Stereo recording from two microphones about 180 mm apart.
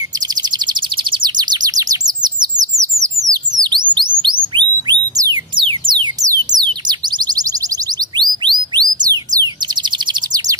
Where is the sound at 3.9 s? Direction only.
25° right (ahead or behind).